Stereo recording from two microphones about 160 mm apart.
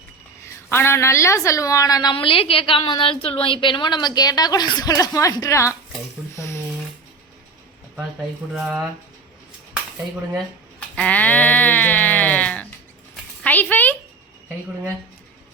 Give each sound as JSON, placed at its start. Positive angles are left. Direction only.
{"t": 0.7, "sound": "a woman's voice", "side_deg": 15}
{"t": 6.3, "sound": "shuffling cards", "side_deg": 20}
{"t": 8.5, "sound": "speech", "side_deg": -5}
{"t": 10.8, "sound": "sheep", "side_deg": 10}
{"t": 13.4, "sound": "a woman's voice", "side_deg": 10}